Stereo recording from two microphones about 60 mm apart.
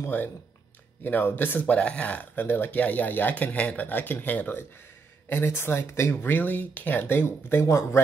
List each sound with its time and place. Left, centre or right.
0.0 s speech: left
1.8 s speech: left
2.4 s speech: left
5.3 s speech: left